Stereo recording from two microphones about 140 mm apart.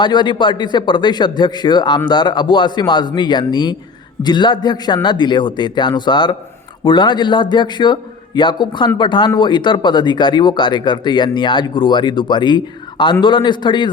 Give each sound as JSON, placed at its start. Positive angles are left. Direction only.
{"t": 0.0, "sound": "speech", "side_deg": 35}